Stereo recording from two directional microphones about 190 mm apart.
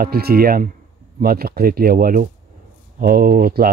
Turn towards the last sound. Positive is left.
turn(degrees=-50)  # may be behind; listen again after turning